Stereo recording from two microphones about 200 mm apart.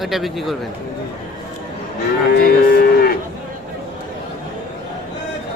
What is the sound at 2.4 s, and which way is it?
Moo, 50° left (ahead or behind).